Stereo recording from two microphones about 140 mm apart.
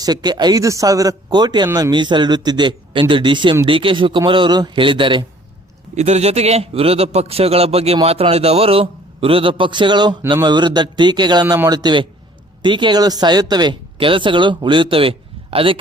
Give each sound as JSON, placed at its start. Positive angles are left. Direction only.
{"t": 0.0, "sound": "speech", "side_deg": -30}
{"t": 5.9, "sound": "a man's voice", "side_deg": -50}